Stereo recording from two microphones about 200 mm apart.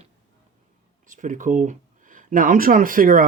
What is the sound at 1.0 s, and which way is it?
Speech, 40° right (ahead or behind).